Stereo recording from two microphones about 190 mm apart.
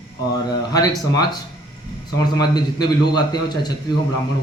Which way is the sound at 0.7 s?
20° left (ahead or behind).